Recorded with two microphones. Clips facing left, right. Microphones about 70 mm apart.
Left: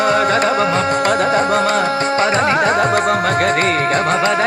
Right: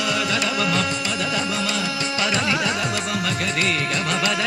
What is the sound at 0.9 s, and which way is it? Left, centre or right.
Music, left.